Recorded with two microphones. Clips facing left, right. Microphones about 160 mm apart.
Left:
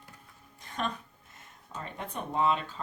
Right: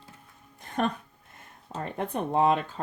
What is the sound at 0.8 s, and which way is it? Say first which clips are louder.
A woman's voice: right 6 dB; 55° right (ahead or behind).